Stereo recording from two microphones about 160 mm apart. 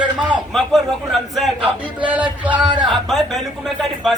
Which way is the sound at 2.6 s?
30° right (ahead or behind).